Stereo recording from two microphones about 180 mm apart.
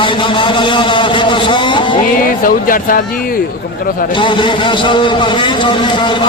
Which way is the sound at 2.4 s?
50° left (ahead or behind).